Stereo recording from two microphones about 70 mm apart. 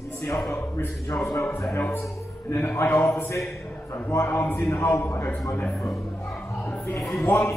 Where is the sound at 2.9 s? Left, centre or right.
Left.